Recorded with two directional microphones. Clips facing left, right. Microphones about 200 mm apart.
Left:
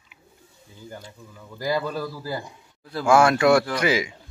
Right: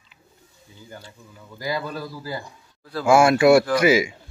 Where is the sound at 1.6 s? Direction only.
40° left (ahead or behind).